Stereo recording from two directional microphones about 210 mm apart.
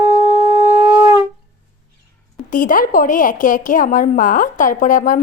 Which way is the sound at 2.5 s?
40° left (ahead or behind).